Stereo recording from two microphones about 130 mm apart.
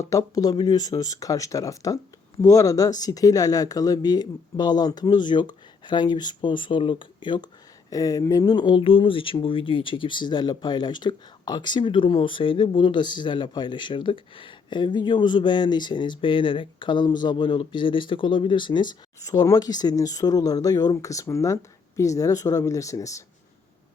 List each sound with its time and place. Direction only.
0.0 s speech: 25° left (ahead or behind)
7.9 s speech: 25° left (ahead or behind)